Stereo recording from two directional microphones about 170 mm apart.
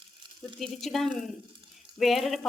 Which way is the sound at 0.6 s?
Centre (ahead or behind).